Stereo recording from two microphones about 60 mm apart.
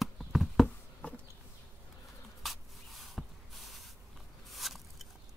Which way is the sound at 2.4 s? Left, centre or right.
Centre.